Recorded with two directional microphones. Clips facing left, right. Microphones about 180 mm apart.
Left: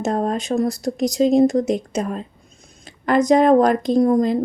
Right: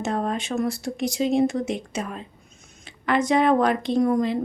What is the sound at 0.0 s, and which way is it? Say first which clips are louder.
Speech: left 5 dB; 40° left (ahead or behind).